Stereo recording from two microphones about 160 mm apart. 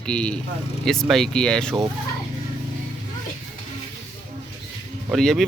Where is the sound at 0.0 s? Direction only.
5° left (ahead or behind).